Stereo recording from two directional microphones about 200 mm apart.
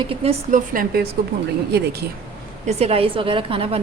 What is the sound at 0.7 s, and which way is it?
Speech, 45° right (ahead or behind).